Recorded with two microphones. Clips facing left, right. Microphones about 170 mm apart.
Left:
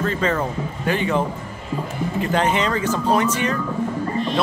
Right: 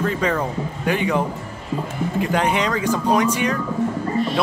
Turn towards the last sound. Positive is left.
turn(degrees=-10)  # may be behind; listen again after turning